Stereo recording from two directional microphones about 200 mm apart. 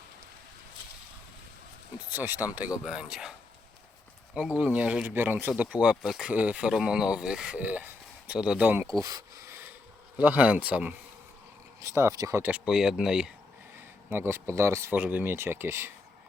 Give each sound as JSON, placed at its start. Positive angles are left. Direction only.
{"t": 2.1, "sound": "speech", "side_deg": -10}
{"t": 4.4, "sound": "speech", "side_deg": -5}